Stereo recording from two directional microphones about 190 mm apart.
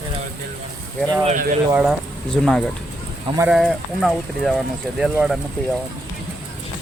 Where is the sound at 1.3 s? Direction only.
45° right (ahead or behind).